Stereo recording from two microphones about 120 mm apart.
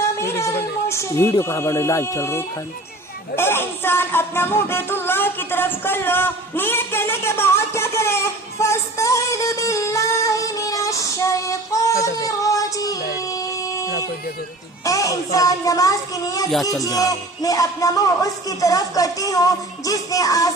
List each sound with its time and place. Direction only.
0.0 s music: 20° left (ahead or behind)
14.8 s speech: 30° left (ahead or behind)